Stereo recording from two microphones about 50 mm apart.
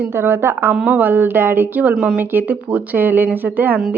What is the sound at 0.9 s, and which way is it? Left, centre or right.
Speech, right.